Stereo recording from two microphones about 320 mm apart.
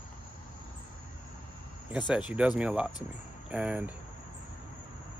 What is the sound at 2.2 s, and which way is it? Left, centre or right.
Speech, centre.